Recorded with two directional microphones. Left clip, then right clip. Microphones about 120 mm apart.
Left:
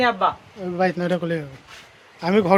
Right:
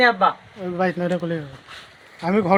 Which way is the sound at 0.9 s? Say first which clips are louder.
Left 1 dB; 85° left.